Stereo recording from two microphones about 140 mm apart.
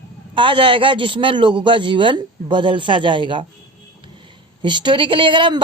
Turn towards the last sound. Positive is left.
turn(degrees=-35)  # may be behind; listen again after turning